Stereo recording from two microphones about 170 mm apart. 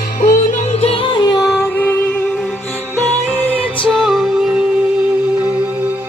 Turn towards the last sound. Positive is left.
turn(degrees=0)  # may be behind; listen again after turning